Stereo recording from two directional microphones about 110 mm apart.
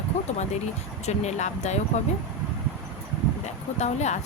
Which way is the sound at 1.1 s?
90° left.